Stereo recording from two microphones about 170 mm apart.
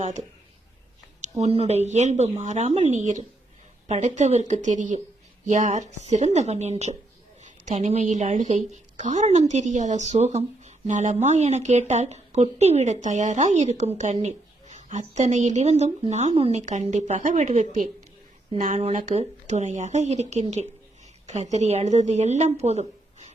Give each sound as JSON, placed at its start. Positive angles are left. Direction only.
{"t": 1.4, "sound": "a woman's voice", "side_deg": -40}